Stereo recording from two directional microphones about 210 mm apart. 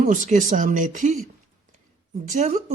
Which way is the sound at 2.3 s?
35° right (ahead or behind).